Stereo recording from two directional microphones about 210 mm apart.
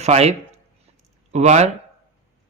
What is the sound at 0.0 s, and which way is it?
Speech, 30° right (ahead or behind).